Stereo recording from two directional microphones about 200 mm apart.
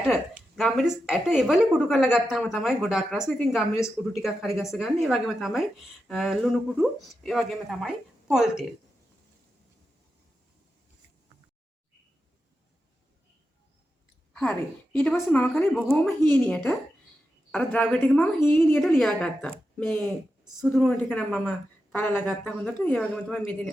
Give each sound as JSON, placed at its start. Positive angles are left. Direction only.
{"t": 0.1, "sound": "speech", "side_deg": 0}
{"t": 14.9, "sound": "a woman's voice", "side_deg": 5}